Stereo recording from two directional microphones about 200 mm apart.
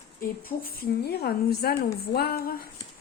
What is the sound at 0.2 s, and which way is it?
Speech, 45° left (ahead or behind).